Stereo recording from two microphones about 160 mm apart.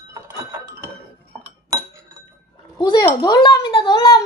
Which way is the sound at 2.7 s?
25° left (ahead or behind).